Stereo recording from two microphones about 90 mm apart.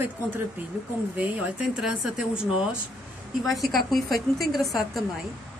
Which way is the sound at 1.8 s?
5° right (ahead or behind).